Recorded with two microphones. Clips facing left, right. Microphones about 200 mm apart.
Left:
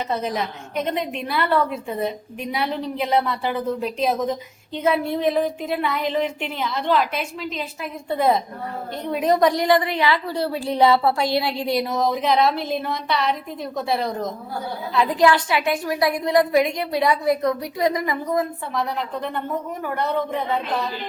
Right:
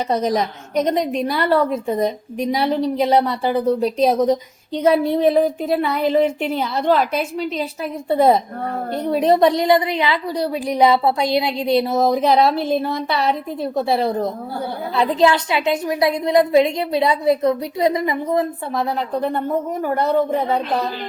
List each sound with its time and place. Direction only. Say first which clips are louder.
0.1 s a woman's voice: right 6 dB; 40° right (ahead or behind)
9.0 s a woman's voice: right 3 dB; 30° right (ahead or behind)
18.7 s a woman's voice: right 4 dB; 40° right (ahead or behind)